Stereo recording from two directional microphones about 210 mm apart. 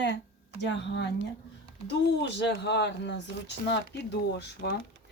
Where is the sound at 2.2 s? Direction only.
55° left (ahead or behind).